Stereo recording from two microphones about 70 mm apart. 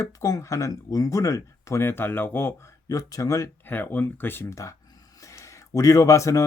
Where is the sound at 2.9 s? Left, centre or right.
Left.